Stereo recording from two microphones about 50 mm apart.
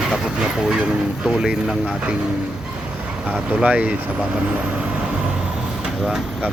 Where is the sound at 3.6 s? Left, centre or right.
Right.